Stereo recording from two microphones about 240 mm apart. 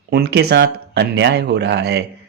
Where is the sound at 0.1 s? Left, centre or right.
Right.